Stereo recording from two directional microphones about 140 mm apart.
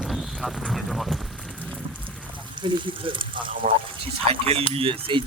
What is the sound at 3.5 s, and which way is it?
Speech, 75° right (ahead or behind).